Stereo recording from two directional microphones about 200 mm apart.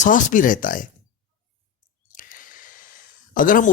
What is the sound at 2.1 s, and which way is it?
Gasp, 40° left (ahead or behind).